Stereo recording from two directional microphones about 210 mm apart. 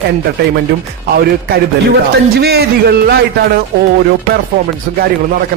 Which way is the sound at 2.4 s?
50° right (ahead or behind).